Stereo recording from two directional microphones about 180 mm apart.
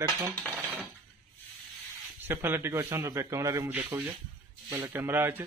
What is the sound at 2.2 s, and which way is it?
A man's voice, 10° right (ahead or behind).